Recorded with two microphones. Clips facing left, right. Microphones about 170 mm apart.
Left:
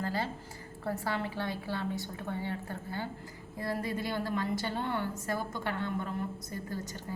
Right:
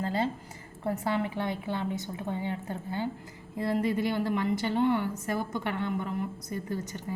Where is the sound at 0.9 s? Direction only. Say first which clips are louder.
Right 4 dB; 20° right (ahead or behind).